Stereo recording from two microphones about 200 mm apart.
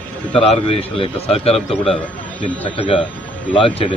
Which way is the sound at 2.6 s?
30° left (ahead or behind).